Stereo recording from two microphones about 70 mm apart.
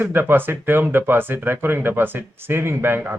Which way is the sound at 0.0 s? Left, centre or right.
Right.